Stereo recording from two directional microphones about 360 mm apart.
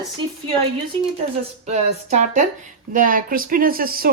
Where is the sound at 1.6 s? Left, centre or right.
Centre.